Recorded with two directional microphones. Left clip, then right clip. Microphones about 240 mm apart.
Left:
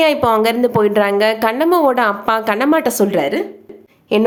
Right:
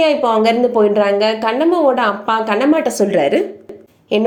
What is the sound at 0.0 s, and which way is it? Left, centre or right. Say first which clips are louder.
A woman's voice: even; left.